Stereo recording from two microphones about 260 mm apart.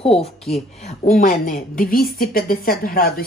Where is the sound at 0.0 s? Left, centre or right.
Left.